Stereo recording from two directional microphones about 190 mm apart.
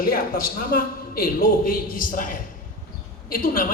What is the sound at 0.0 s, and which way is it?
A man's voice, 50° left (ahead or behind).